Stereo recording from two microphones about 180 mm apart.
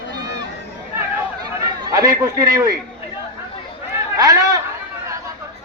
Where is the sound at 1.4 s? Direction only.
20° right (ahead or behind).